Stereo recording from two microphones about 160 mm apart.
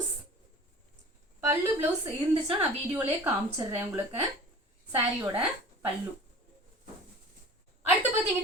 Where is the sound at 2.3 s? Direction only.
35° right (ahead or behind).